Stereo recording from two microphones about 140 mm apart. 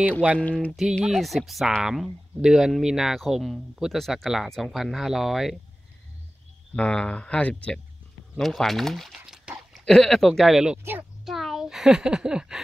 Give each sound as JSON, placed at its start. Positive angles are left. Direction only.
{"t": 0.4, "sound": "speech", "side_deg": 10}
{"t": 0.7, "sound": "speech", "side_deg": 0}
{"t": 6.7, "sound": "speech", "side_deg": 5}
{"t": 10.8, "sound": "a child's voice", "side_deg": -15}
{"t": 11.2, "sound": "speech", "side_deg": 0}